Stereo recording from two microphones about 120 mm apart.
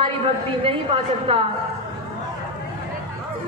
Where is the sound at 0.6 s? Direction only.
50° right (ahead or behind).